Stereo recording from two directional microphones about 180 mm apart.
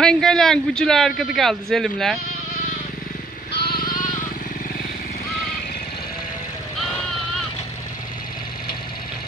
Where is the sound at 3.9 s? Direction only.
45° left (ahead or behind).